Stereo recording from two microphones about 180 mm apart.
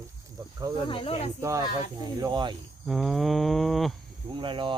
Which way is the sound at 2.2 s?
25° right (ahead or behind).